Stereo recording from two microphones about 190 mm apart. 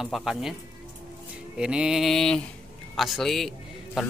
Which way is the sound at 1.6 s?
5° right (ahead or behind).